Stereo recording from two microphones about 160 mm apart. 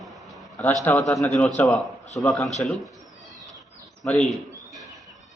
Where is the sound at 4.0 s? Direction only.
Centre (ahead or behind).